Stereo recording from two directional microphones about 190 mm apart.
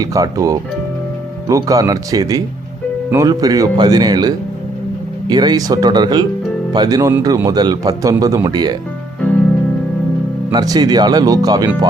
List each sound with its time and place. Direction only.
0.0 s speech: 20° right (ahead or behind)
10.5 s speech: 20° right (ahead or behind)